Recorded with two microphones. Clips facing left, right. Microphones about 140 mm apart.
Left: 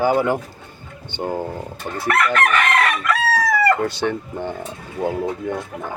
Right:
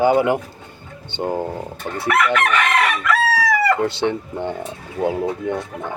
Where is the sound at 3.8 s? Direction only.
25° right (ahead or behind).